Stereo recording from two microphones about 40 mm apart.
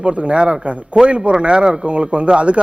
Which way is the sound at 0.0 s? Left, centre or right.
Right.